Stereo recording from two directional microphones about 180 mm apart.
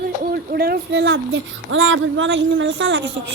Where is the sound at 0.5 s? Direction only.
60° right (ahead or behind).